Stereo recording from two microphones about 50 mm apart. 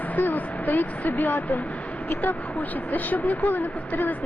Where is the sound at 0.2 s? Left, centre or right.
Left.